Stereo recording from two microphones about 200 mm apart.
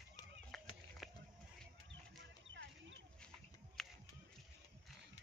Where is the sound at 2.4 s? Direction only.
70° right (ahead or behind).